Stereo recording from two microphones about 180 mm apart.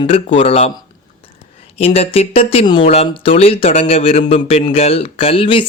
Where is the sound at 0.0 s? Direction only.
30° left (ahead or behind).